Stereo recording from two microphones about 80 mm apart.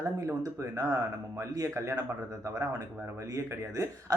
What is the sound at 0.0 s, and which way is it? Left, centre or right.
Speech, right.